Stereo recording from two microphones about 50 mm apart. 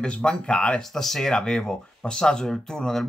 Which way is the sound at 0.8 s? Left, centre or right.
Centre.